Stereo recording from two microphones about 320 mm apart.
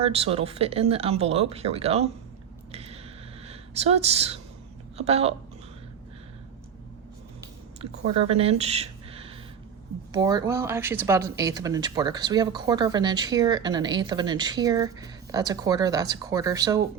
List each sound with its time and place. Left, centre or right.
0.0 s speech: centre
2.7 s a sound: centre
3.4 s a woman's voice: centre
8.3 s speech: centre